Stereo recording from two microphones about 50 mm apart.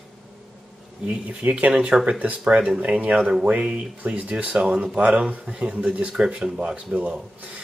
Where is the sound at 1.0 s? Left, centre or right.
Right.